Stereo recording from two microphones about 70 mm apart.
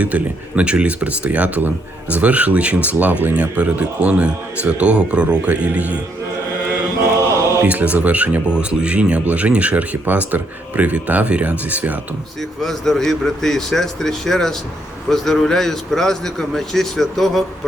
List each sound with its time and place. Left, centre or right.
0.0 s speech: centre
7.2 s chant: right
7.6 s speech: right
12.4 s speech: centre